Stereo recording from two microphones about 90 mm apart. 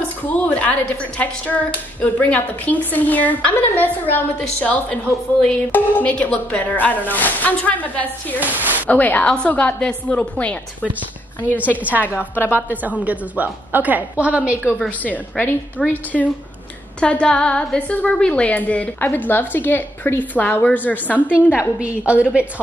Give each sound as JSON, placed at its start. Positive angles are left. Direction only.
{"t": 0.3, "sound": "a woman's voice", "side_deg": 15}
{"t": 8.5, "sound": "speech", "side_deg": -20}
{"t": 8.8, "sound": "a woman's voice", "side_deg": 20}
{"t": 11.7, "sound": "a woman's voice", "side_deg": -20}
{"t": 12.1, "sound": "a woman's voice", "side_deg": 25}
{"t": 13.0, "sound": "a woman's voice", "side_deg": -15}
{"t": 15.0, "sound": "a woman's voice", "side_deg": 20}
{"t": 15.8, "sound": "speech", "side_deg": 5}
{"t": 17.0, "sound": "a woman's voice", "side_deg": 10}
{"t": 21.3, "sound": "a woman's voice", "side_deg": -10}